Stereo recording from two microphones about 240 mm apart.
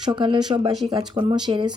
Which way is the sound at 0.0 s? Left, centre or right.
Centre.